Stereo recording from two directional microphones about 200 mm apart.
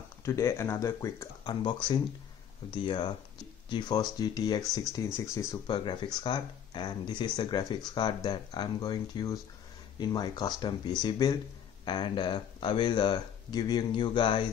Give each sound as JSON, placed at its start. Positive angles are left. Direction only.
{"t": 0.2, "sound": "speech", "side_deg": 15}